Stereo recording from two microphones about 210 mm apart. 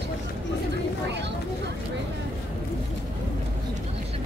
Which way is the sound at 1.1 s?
55° right (ahead or behind).